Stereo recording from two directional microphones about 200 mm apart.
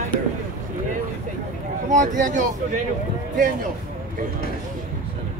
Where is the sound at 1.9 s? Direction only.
40° right (ahead or behind).